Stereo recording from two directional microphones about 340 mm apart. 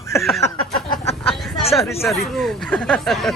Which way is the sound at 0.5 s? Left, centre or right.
Centre.